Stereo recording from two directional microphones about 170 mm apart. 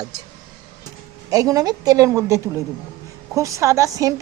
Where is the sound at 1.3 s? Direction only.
20° right (ahead or behind).